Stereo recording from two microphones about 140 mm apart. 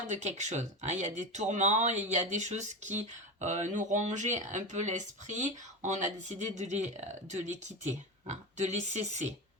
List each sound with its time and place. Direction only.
0.1 s speech: 55° right (ahead or behind)